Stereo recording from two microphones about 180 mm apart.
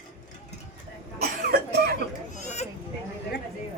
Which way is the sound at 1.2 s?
50° right (ahead or behind).